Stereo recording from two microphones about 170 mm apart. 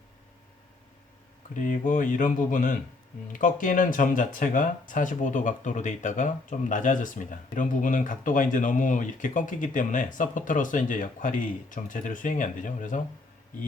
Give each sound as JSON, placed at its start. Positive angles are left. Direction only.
{"t": 1.5, "sound": "speech", "side_deg": 50}